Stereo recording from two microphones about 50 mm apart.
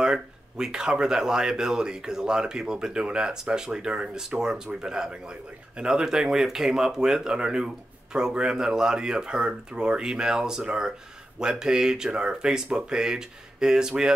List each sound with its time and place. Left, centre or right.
0.0 s speech: centre